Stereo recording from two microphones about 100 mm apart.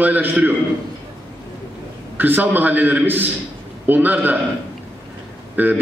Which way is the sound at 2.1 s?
20° right (ahead or behind).